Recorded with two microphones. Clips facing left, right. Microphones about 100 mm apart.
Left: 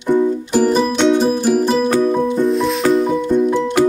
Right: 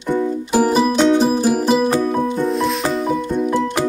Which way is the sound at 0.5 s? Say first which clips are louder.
Right 2 dB; 10° right (ahead or behind).